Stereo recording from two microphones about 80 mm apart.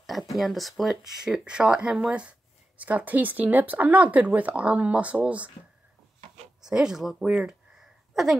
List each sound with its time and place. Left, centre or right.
0.0 s speech: centre
6.6 s speech: centre
7.2 s a sound: centre